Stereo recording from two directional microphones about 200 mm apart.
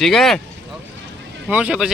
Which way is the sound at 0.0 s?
Centre (ahead or behind).